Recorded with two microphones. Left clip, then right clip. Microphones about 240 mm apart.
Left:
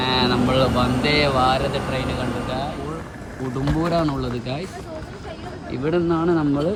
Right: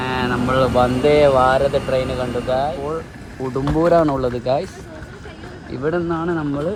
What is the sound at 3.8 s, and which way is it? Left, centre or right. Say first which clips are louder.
Speech: right 8 dB; right.